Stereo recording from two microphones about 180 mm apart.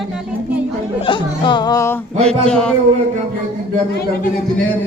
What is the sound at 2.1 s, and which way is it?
Speech, 35° right (ahead or behind).